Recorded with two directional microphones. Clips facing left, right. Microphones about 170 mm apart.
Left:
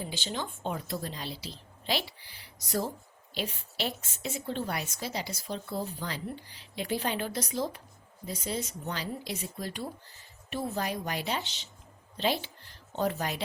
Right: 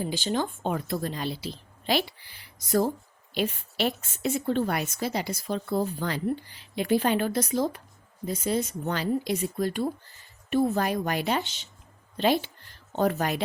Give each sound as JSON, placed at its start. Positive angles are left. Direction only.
{"t": 0.0, "sound": "a woman's voice", "side_deg": -50}